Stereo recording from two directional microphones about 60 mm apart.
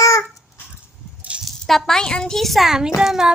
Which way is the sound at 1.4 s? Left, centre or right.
Centre.